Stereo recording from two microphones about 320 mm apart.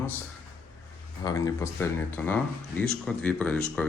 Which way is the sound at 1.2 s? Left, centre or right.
Centre.